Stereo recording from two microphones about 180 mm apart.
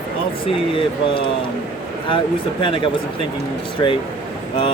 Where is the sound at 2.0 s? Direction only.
30° left (ahead or behind).